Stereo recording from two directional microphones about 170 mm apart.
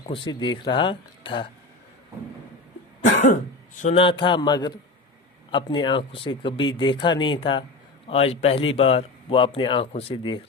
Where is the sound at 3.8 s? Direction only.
30° left (ahead or behind).